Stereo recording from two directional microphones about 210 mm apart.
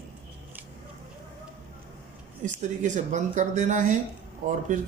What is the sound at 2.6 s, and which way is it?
Speech, 35° right (ahead or behind).